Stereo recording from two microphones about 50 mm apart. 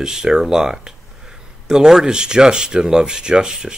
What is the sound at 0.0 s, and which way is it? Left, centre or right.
Speech, centre.